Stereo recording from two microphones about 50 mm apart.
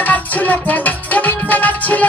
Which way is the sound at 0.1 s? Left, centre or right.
Left.